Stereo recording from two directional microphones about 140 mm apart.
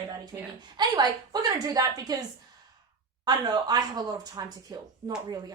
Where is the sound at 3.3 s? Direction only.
30° right (ahead or behind).